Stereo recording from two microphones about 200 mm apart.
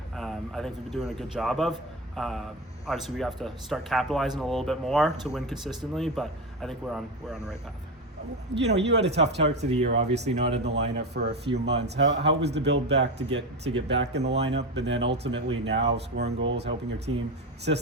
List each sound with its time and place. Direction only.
0.2 s speech: centre (ahead or behind)
8.5 s speech: 60° right (ahead or behind)
9.6 s speech: 30° right (ahead or behind)
10.6 s speech: 55° right (ahead or behind)